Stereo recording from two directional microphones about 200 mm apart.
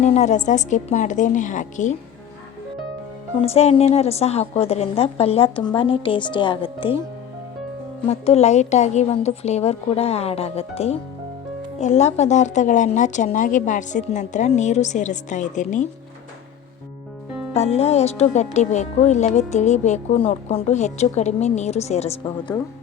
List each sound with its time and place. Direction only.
0.0 s speech: 35° left (ahead or behind)
3.3 s a woman's voice: 30° left (ahead or behind)
8.0 s speech: 30° left (ahead or behind)
17.5 s speech: 30° left (ahead or behind)